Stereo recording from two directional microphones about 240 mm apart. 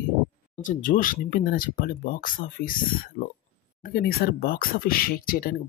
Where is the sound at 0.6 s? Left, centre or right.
Left.